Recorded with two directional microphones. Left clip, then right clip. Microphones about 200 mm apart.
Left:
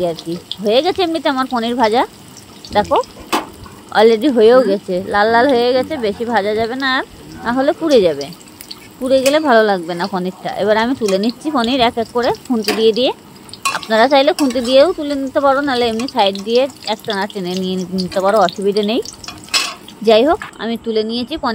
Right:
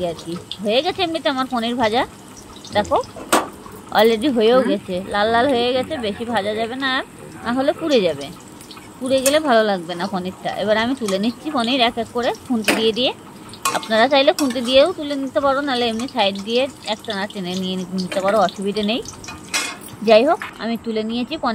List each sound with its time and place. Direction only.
0.7 s a woman's voice: 40° left (ahead or behind)
20.1 s speech: 40° left (ahead or behind)